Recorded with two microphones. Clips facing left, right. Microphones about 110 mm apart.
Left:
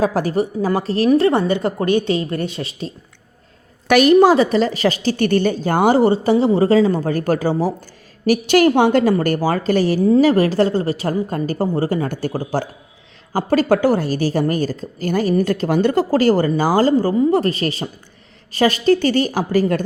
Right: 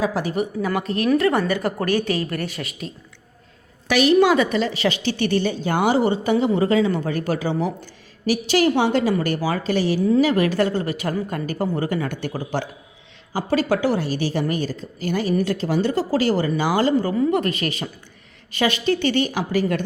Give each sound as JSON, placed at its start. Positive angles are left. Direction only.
{"t": 0.0, "sound": "a woman's voice", "side_deg": 45}
{"t": 3.8, "sound": "a woman's voice", "side_deg": 50}
{"t": 8.3, "sound": "a woman's voice", "side_deg": 55}
{"t": 13.3, "sound": "a woman's voice", "side_deg": 50}